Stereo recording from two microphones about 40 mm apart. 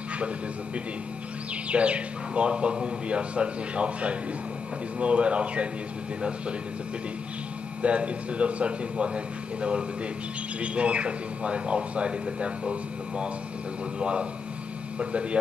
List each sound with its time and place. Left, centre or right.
1.7 s speech: right
7.8 s speech: right